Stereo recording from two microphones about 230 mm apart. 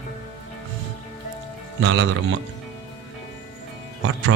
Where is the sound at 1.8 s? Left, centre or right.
Right.